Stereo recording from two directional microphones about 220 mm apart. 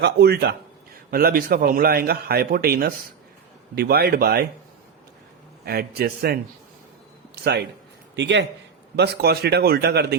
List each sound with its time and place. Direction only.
0.0 s a man's voice: 45° right (ahead or behind)
5.6 s a man's voice: 45° right (ahead or behind)
7.4 s a man's voice: 50° right (ahead or behind)